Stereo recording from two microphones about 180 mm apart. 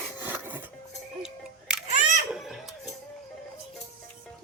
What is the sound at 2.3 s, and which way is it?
Chicken, centre (ahead or behind).